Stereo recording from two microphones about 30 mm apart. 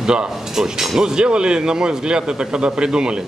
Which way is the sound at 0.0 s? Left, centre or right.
Right.